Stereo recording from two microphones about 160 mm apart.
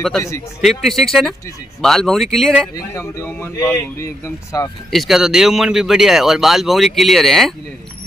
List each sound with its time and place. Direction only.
0.6 s speech: centre (ahead or behind)
2.7 s speech: 20° left (ahead or behind)
4.9 s speech: centre (ahead or behind)